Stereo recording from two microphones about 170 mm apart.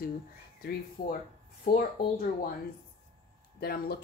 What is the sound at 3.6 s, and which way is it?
Speech, 65° left (ahead or behind).